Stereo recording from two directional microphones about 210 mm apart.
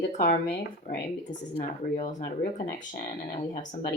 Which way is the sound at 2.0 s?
35° left (ahead or behind).